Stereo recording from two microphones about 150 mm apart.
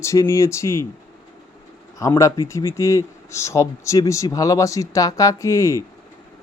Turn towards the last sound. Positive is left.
turn(degrees=20)  # may be behind; listen again after turning